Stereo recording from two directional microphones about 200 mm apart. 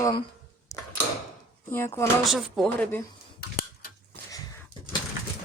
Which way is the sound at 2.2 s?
Centre (ahead or behind).